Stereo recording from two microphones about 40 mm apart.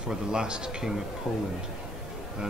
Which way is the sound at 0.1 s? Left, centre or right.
Centre.